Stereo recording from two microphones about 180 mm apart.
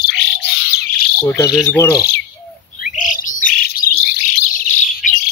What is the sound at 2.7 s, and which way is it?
Bird, 45° left (ahead or behind).